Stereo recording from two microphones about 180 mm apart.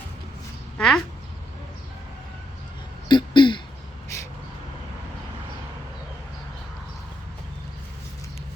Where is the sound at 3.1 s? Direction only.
25° left (ahead or behind).